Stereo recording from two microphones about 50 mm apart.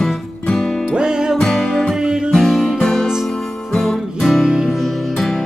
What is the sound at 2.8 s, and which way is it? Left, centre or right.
Music, centre.